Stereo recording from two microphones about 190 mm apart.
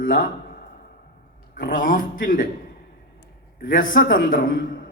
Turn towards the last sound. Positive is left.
turn(degrees=45)  # may be behind; listen again after turning